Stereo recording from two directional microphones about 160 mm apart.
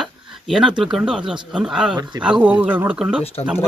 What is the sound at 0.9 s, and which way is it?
Speech, 5° right (ahead or behind).